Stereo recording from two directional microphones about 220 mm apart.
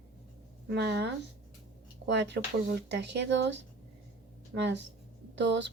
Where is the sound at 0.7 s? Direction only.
50° right (ahead or behind).